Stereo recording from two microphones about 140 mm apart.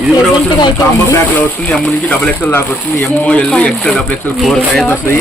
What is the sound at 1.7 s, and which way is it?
Speech, 5° left (ahead or behind).